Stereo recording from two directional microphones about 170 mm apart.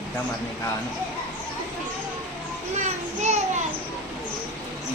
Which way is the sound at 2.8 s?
45° right (ahead or behind).